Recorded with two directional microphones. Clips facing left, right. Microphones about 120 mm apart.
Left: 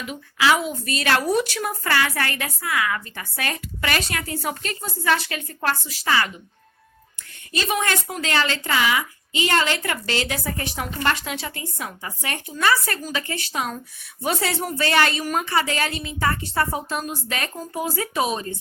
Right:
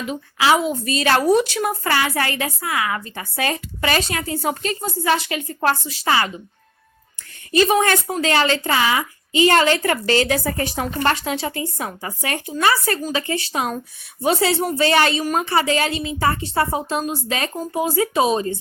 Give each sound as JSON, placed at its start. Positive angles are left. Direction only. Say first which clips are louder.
{"t": 0.1, "sound": "a woman's voice", "louder": "right 3 dB", "side_deg": -25}
{"t": 7.6, "sound": "a woman's voice", "louder": "right 7 dB", "side_deg": -35}